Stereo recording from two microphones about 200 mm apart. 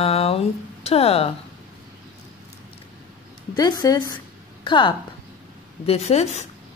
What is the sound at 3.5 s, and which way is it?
A woman's voice, 20° left (ahead or behind).